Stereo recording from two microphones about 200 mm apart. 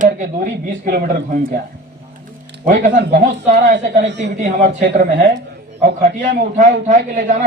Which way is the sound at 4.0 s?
60° right (ahead or behind).